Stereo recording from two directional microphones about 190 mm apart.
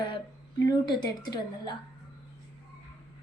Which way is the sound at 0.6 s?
20° left (ahead or behind).